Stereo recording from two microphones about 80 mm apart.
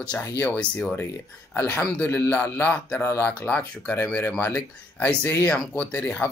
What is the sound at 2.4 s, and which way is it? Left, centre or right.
Speech, centre.